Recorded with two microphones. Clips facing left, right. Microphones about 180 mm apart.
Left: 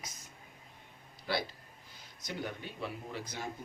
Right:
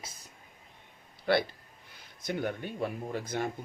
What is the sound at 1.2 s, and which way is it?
Speech, 60° right (ahead or behind).